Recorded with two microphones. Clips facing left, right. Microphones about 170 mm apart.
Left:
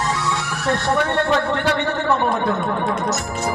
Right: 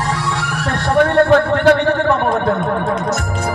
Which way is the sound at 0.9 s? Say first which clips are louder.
Right 9 dB; 55° right (ahead or behind).